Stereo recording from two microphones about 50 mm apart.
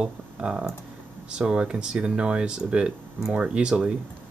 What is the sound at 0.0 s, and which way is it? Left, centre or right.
Speech, centre.